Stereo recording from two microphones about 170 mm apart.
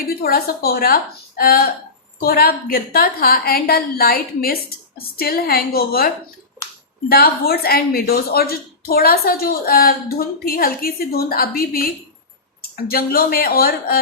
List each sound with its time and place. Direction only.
0.2 s speech: 60° left (ahead or behind)
7.1 s speech: 60° left (ahead or behind)